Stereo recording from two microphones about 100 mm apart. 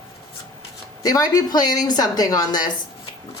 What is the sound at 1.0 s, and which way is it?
Speech, 40° left (ahead or behind).